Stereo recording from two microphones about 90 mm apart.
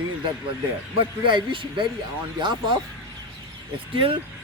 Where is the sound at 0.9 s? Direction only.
60° right (ahead or behind).